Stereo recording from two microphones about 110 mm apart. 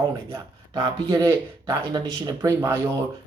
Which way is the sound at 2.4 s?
20° right (ahead or behind).